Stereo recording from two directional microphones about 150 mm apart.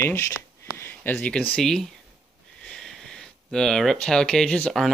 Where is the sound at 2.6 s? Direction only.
5° left (ahead or behind).